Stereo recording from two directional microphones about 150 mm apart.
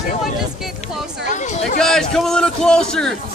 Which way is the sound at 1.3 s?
55° left (ahead or behind).